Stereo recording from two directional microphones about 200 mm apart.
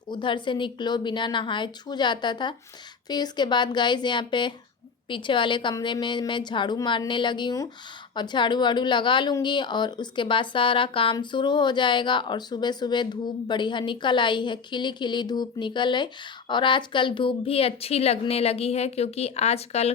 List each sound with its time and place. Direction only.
0.1 s a woman's voice: 25° left (ahead or behind)